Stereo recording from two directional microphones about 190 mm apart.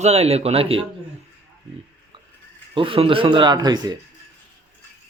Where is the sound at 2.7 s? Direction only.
30° right (ahead or behind).